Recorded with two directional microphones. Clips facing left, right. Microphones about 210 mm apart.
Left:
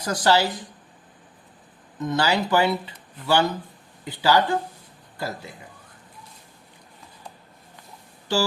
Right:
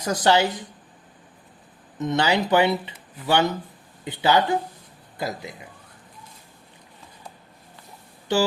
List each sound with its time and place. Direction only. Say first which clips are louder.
0.0 s speech: right 1 dB; 20° right (ahead or behind)
2.0 s speech: right 1 dB; 20° right (ahead or behind)